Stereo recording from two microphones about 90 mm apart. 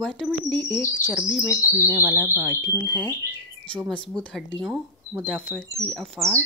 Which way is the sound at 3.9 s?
10° left (ahead or behind).